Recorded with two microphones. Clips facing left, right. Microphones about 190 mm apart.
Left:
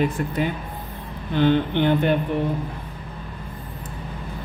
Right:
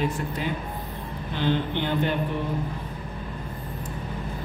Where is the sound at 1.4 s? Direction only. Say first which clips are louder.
Left 7 dB; 55° left (ahead or behind).